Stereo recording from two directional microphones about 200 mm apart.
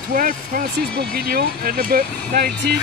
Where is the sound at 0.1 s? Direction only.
45° right (ahead or behind).